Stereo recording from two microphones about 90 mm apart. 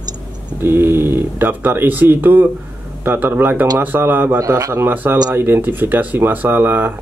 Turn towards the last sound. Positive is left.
turn(degrees=-25)  # may be behind; listen again after turning